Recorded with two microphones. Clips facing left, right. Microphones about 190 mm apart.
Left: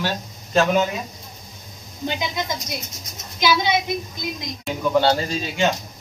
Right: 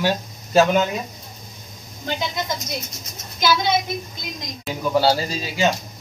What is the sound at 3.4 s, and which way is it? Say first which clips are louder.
Speech: even; 15° left (ahead or behind).